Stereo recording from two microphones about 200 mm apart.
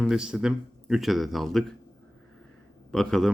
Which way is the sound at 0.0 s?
5° right (ahead or behind).